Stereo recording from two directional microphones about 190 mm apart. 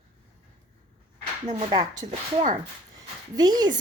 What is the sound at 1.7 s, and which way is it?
Speech, 20° right (ahead or behind).